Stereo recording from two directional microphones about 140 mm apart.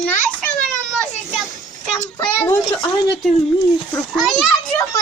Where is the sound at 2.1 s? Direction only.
15° left (ahead or behind).